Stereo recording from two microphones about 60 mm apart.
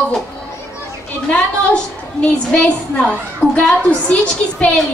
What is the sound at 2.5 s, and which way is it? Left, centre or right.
A woman's voice, centre.